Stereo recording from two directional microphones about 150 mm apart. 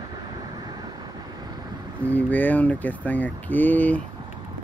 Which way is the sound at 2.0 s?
10° left (ahead or behind).